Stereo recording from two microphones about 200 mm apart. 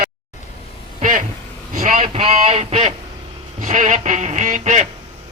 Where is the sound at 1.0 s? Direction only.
40° right (ahead or behind).